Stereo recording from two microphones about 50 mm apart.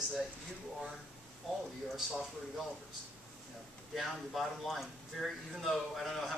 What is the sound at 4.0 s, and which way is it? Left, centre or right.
Speech, centre.